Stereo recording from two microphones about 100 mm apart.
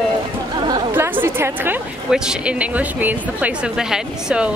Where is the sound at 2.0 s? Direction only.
5° right (ahead or behind).